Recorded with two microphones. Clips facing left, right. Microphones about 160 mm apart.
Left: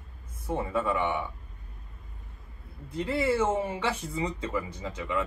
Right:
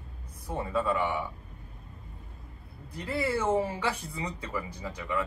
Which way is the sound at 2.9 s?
25° left (ahead or behind).